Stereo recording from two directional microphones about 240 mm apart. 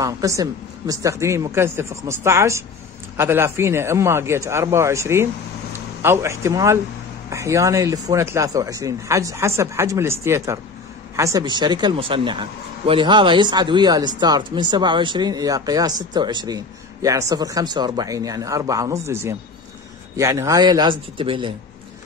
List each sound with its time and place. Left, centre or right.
0.0 s speech: centre